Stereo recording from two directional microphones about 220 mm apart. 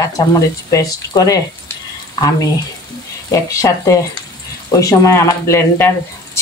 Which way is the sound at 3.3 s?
15° left (ahead or behind).